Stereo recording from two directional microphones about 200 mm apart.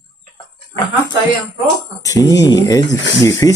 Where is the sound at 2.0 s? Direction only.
15° left (ahead or behind).